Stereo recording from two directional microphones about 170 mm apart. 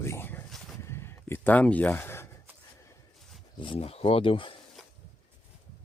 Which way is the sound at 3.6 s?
35° left (ahead or behind).